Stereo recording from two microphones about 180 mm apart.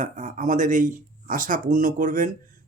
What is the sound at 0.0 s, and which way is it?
Speech, 45° right (ahead or behind).